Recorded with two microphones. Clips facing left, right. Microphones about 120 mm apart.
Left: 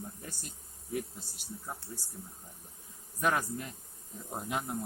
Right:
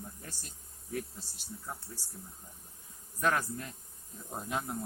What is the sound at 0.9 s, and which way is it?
Speech, 15° left (ahead or behind).